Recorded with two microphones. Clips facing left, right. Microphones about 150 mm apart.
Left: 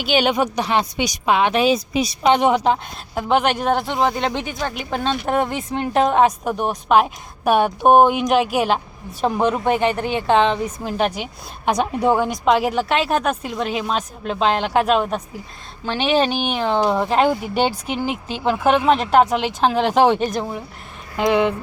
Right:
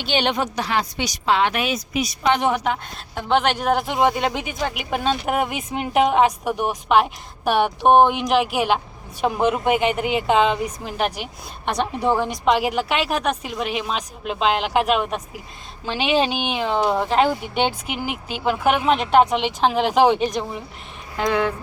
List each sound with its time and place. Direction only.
0.0 s a woman's voice: 10° left (ahead or behind)
1.5 s a woman's voice: 30° left (ahead or behind)
3.2 s a woman's voice: 5° left (ahead or behind)
3.8 s a woman's voice: 15° right (ahead or behind); by 17.7 s 5° left (ahead or behind)
17.8 s speech: 10° right (ahead or behind)
18.9 s a woman's voice: centre (ahead or behind)
21.2 s a woman's voice: 20° left (ahead or behind)